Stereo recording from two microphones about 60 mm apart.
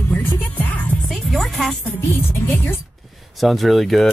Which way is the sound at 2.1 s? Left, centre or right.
Left.